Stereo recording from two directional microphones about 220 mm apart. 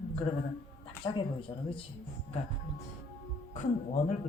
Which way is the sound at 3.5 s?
35° left (ahead or behind).